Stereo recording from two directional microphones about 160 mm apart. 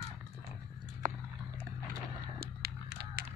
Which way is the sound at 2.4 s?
75° right (ahead or behind).